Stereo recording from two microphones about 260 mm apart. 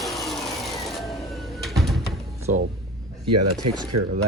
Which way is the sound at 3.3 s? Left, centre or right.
Right.